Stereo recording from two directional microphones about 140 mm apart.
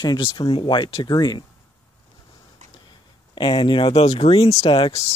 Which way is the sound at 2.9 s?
35° left (ahead or behind).